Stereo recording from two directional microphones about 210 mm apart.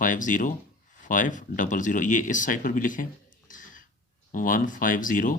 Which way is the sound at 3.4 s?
40° left (ahead or behind).